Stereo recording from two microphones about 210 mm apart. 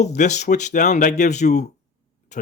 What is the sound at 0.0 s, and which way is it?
A man's voice, 35° left (ahead or behind).